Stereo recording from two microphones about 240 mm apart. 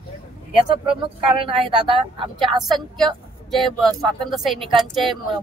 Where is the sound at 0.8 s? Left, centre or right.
Right.